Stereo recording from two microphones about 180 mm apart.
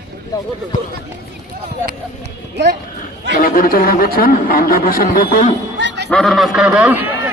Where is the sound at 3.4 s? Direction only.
55° left (ahead or behind).